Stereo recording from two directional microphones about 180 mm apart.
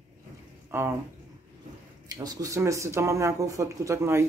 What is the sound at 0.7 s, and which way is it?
Speech, 15° right (ahead or behind).